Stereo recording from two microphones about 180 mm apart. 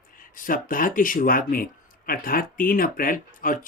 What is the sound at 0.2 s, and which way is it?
Speech, 50° left (ahead or behind).